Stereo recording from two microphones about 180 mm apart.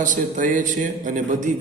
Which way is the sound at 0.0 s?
45° right (ahead or behind).